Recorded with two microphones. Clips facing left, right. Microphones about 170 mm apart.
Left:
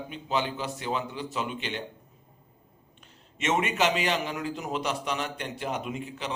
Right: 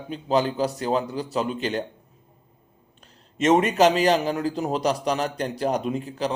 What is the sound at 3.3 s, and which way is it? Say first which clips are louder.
A man's voice: right 8 dB; 35° right (ahead or behind).